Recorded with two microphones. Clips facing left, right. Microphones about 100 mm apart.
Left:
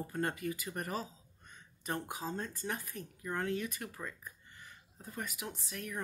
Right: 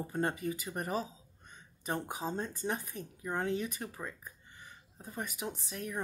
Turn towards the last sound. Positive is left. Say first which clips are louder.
# right 3 dB
turn(degrees=-25)  # may be behind; listen again after turning